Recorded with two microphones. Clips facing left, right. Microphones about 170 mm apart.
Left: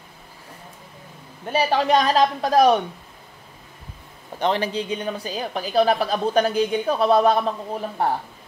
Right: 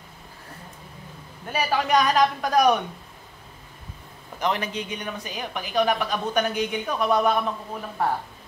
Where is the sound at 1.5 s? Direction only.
30° left (ahead or behind).